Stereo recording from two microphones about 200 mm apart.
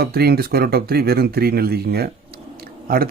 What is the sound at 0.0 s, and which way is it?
Speech, 50° right (ahead or behind).